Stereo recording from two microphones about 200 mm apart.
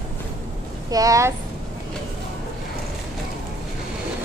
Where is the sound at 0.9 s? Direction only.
15° right (ahead or behind).